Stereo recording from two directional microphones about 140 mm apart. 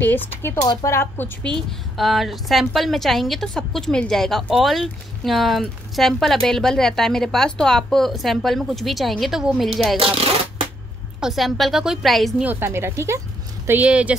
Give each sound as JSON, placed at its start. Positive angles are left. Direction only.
{"t": 0.0, "sound": "speech", "side_deg": 15}
{"t": 9.9, "sound": "speech", "side_deg": -45}
{"t": 11.1, "sound": "speech", "side_deg": 0}
{"t": 12.4, "sound": "a woman's voice", "side_deg": -15}